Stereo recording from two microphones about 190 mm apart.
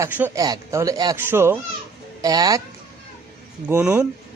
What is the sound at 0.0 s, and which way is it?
Speech, 10° right (ahead or behind).